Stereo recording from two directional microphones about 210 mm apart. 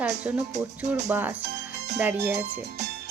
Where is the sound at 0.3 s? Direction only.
10° right (ahead or behind).